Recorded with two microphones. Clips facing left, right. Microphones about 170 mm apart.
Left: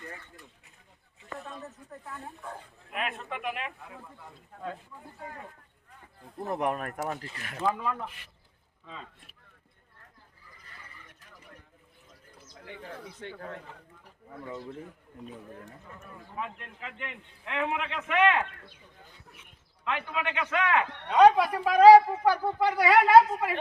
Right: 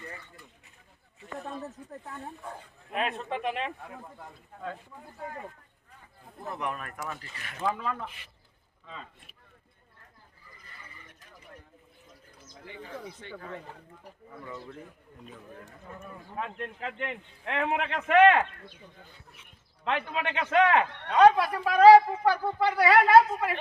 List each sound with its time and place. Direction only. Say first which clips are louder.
2.9 s a man's voice: right 4 dB; 35° right (ahead or behind)
6.5 s speech: left 5 dB; 45° left (ahead or behind)
7.8 s a woman's voice: left 1 dB; 10° left (ahead or behind)
14.4 s a man's voice: left 3 dB; 25° left (ahead or behind)
16.4 s a man's voice: right 4 dB; 40° right (ahead or behind)
19.8 s a man's voice: right 2 dB; 30° right (ahead or behind)
21.1 s a woman's voice: left 1 dB; 15° left (ahead or behind)